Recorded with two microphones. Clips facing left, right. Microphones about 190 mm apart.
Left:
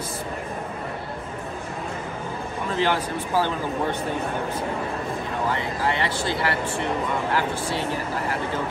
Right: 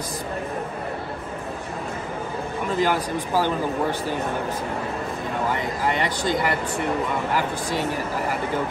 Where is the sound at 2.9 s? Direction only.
10° right (ahead or behind).